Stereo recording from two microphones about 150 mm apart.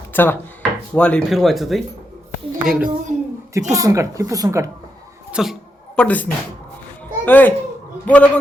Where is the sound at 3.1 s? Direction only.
50° right (ahead or behind).